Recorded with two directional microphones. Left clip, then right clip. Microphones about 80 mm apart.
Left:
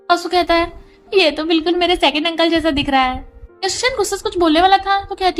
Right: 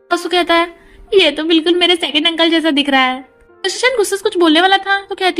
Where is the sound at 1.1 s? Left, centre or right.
Right.